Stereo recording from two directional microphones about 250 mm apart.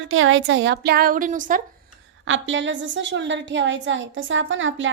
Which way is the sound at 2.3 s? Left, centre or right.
Right.